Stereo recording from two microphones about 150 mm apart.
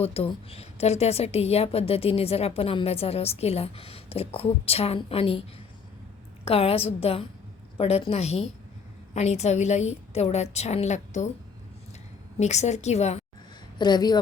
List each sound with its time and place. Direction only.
0.0 s a woman's voice: 40° left (ahead or behind)
12.4 s a woman's voice: 50° left (ahead or behind)
13.7 s speech: 30° left (ahead or behind)